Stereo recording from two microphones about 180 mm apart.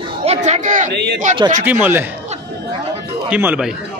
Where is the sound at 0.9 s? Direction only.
70° right (ahead or behind).